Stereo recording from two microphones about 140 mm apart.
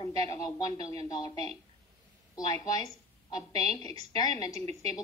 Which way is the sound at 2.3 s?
30° left (ahead or behind).